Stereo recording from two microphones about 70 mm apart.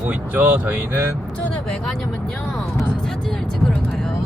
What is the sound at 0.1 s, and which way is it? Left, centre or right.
Speech, right.